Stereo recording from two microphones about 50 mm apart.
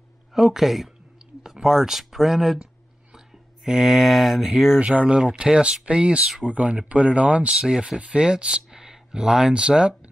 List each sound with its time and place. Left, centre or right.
0.3 s speech: centre
3.6 s mantra: centre
4.7 s speech: right
7.5 s speech: centre